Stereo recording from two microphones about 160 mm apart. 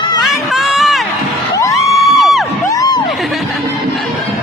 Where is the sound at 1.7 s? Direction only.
Centre (ahead or behind).